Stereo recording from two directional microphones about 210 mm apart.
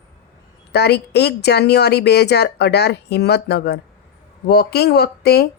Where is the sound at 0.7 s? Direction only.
50° left (ahead or behind).